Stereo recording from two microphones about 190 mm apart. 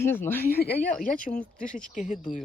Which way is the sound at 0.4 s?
55° left (ahead or behind).